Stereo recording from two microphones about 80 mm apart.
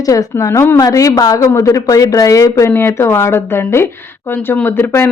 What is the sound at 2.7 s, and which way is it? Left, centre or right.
Speech, left.